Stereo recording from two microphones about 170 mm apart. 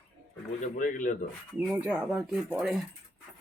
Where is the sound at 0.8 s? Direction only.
50° left (ahead or behind).